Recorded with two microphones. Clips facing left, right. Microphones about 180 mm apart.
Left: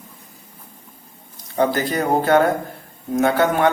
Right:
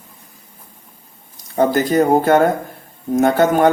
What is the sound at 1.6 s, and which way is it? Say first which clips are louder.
A man's voice: right 5 dB; 45° right (ahead or behind).